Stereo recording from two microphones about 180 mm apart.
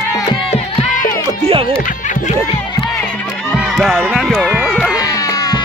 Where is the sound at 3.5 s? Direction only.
Centre (ahead or behind).